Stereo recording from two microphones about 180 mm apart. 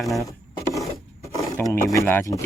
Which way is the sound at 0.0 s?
Centre (ahead or behind).